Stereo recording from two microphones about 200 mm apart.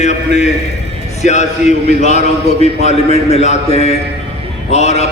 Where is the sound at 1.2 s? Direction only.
35° left (ahead or behind).